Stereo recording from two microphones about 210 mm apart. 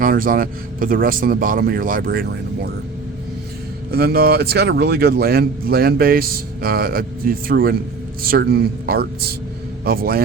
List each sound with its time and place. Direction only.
0.0 s a man's voice: 40° right (ahead or behind)
3.9 s a man's voice: 50° right (ahead or behind)